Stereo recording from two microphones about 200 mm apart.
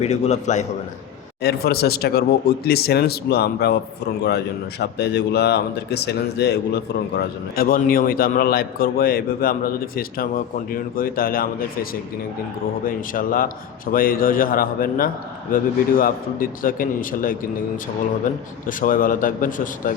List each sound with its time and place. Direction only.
0.0 s a man's voice: 35° left (ahead or behind)
1.4 s speech: 50° left (ahead or behind)
18.7 s speech: 45° left (ahead or behind)